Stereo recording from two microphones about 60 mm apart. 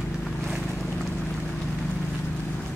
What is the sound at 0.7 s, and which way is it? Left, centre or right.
Boat, centre.